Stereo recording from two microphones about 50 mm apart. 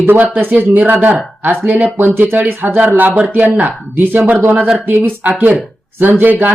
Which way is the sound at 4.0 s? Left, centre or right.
Right.